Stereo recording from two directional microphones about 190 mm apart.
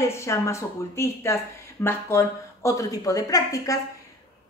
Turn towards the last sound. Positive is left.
turn(degrees=15)  # may be behind; listen again after turning